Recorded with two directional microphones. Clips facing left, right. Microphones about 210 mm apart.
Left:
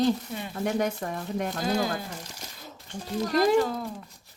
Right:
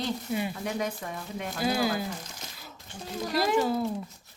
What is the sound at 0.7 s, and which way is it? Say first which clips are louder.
Speech: left 5 dB; 45° left (ahead or behind).